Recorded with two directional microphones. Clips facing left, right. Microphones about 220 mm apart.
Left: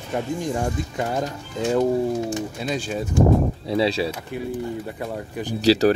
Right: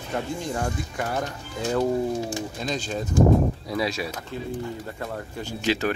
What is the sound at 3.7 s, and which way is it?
Speech, 30° left (ahead or behind).